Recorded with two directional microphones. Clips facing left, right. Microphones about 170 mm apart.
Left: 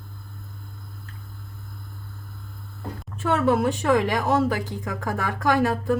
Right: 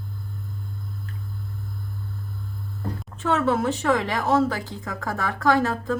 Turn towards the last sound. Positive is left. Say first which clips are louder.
# even
turn(degrees=15)  # may be behind; listen again after turning